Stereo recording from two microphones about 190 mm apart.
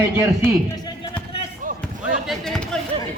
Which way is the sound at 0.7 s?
20° left (ahead or behind).